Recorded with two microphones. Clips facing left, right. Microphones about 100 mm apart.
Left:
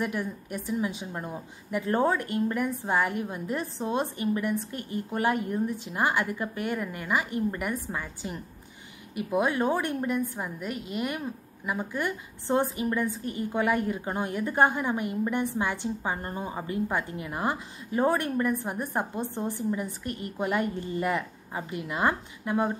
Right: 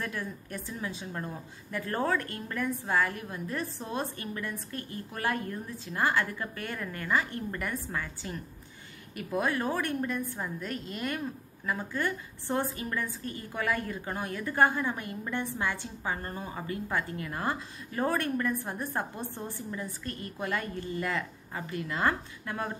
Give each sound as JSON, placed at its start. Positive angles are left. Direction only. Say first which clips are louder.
{"t": 0.0, "sound": "a woman's voice", "louder": "left 6 dB", "side_deg": 15}